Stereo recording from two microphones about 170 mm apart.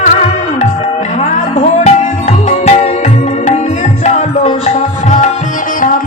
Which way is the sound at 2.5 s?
40° left (ahead or behind).